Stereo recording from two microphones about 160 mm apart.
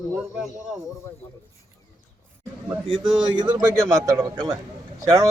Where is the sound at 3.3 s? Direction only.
25° right (ahead or behind).